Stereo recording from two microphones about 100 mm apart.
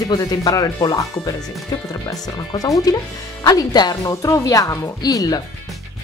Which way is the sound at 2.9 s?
40° left (ahead or behind).